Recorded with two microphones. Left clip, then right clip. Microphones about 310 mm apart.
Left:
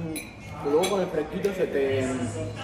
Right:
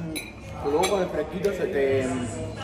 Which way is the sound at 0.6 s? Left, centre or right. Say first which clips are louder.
Left 1 dB; left.